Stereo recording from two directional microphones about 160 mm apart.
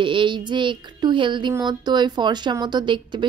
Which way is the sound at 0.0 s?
30° right (ahead or behind).